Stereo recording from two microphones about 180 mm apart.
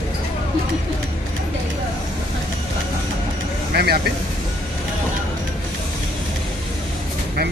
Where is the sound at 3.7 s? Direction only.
60° right (ahead or behind).